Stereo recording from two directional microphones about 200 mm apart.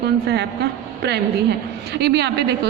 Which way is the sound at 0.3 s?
55° right (ahead or behind).